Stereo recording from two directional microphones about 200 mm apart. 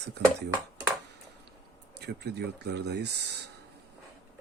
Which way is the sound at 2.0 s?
55° right (ahead or behind).